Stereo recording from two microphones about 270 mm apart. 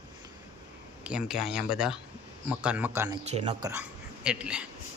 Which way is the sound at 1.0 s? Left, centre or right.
Centre.